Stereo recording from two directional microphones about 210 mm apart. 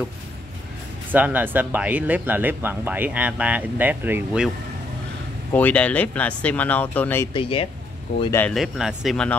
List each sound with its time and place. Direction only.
1.1 s speech: 10° right (ahead or behind)
5.5 s speech: 5° left (ahead or behind)
7.3 s speech: 25° left (ahead or behind)
8.3 s speech: 10° left (ahead or behind)
8.5 s speech: centre (ahead or behind)